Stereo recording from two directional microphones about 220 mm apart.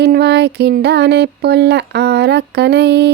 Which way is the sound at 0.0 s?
50° right (ahead or behind).